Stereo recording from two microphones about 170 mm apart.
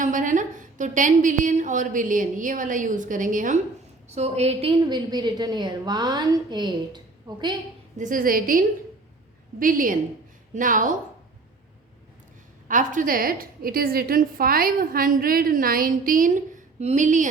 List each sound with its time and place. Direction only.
0.0 s a woman's voice: 50° right (ahead or behind)
4.9 s a woman's voice: 25° right (ahead or behind)
7.9 s a woman's voice: 50° right (ahead or behind)
12.6 s a woman's voice: 50° right (ahead or behind)